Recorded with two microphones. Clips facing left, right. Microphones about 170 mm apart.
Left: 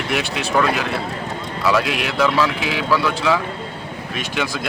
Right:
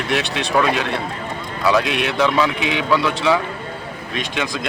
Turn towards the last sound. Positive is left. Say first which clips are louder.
# even
turn(degrees=5)  # may be behind; listen again after turning